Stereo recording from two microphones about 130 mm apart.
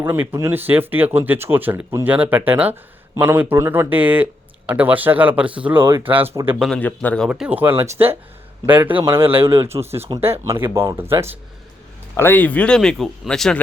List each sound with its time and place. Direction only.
0.0 s speech: 15° right (ahead or behind)
6.7 s speech: 10° left (ahead or behind)
7.3 s speech: 10° right (ahead or behind)
12.1 s speech: 15° left (ahead or behind)